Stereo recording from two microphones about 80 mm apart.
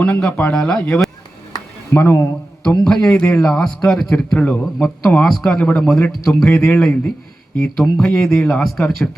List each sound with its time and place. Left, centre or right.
0.0 s speech: centre
1.9 s speech: left
2.8 s speech: centre